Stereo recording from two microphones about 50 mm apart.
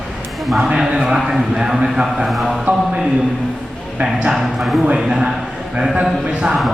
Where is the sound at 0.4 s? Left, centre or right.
Centre.